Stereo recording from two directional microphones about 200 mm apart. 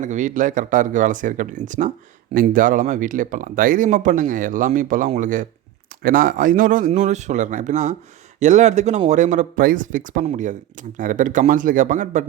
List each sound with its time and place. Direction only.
0.0 s speech: 40° right (ahead or behind)